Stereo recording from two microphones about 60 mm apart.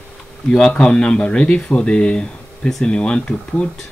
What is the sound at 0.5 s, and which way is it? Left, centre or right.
Speech, centre.